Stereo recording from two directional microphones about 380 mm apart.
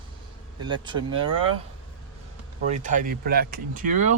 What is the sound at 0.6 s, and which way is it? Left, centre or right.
Speech, centre.